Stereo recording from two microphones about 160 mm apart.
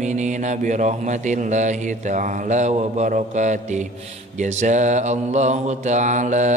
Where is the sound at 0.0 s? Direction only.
50° right (ahead or behind).